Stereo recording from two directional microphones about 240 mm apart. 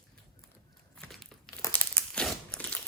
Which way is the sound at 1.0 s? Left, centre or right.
Centre.